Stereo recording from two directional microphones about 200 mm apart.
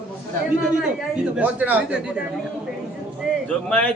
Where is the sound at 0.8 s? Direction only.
5° right (ahead or behind).